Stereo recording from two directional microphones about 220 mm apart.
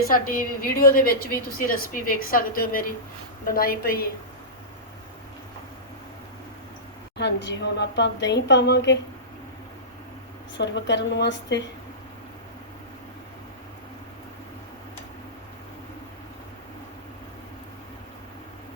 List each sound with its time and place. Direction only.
0.1 s a woman's voice: 40° left (ahead or behind)
7.4 s a woman's voice: 50° left (ahead or behind)
10.6 s a woman's voice: 55° left (ahead or behind)